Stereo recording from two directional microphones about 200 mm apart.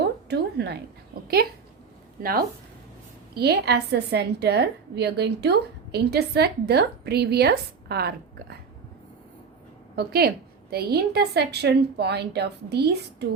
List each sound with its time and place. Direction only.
0.0 s a sound: 55° right (ahead or behind)
2.2 s a woman's voice: 45° right (ahead or behind)
9.9 s a woman's voice: 50° right (ahead or behind)